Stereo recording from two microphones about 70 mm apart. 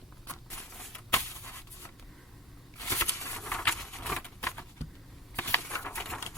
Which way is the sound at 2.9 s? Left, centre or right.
Left.